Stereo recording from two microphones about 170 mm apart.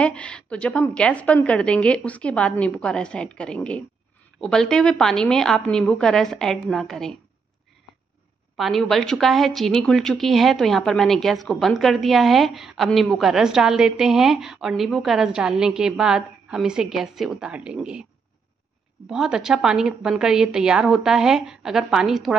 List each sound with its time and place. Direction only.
0.0 s a woman's voice: 5° left (ahead or behind)
8.5 s a woman's voice: centre (ahead or behind)
19.0 s a woman's voice: 5° right (ahead or behind)